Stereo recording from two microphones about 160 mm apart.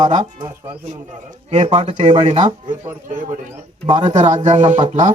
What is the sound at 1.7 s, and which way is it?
Speech, 35° right (ahead or behind).